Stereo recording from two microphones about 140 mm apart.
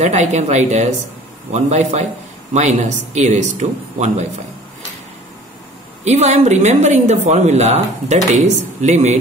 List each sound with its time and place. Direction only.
0.0 s a woman's voice: 55° right (ahead or behind)
6.0 s a woman's voice: 55° right (ahead or behind)